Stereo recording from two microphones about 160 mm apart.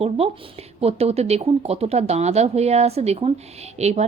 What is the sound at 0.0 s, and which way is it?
Speech, 40° right (ahead or behind).